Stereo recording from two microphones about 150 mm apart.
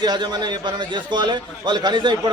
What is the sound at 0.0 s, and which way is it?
A man's voice, 30° right (ahead or behind).